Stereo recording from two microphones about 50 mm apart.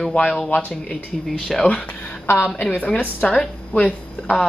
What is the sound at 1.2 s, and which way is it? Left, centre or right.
Speech, centre.